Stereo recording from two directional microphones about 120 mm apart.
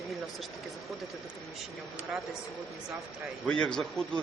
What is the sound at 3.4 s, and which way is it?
Speech, 5° left (ahead or behind).